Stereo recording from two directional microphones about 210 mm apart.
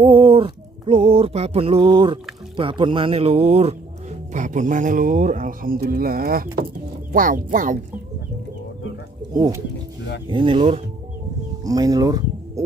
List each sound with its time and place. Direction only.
0.0 s a sound: 25° right (ahead or behind)
2.5 s speech: 25° right (ahead or behind)
9.3 s speech: 20° right (ahead or behind)